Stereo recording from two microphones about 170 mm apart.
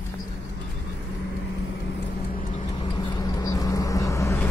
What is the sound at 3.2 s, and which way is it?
Vehicle, 20° left (ahead or behind).